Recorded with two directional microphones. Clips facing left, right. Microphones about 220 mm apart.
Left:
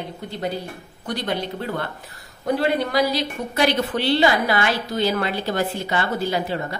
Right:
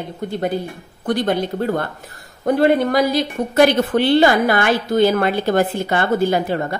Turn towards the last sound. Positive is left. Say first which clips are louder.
# right 5 dB
turn(degrees=-50)  # may be behind; listen again after turning